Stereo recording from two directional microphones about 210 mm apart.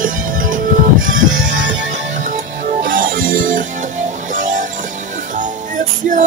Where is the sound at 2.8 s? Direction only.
40° right (ahead or behind).